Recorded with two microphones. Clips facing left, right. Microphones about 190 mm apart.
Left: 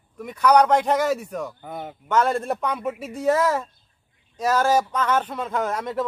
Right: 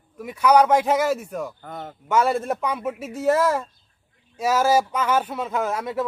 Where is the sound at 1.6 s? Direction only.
10° left (ahead or behind).